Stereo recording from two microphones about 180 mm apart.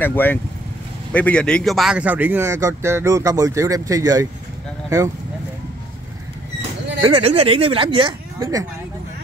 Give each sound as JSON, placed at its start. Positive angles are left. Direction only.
{"t": 0.0, "sound": "speech", "side_deg": 10}
{"t": 7.0, "sound": "speech", "side_deg": -30}